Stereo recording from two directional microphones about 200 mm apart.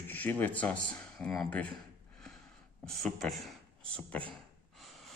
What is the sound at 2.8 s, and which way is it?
Speech, centre (ahead or behind).